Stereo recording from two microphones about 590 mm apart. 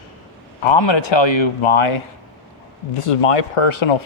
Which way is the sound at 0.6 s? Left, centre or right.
Left.